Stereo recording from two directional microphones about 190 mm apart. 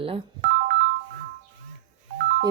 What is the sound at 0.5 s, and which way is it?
Ringtone, 55° right (ahead or behind).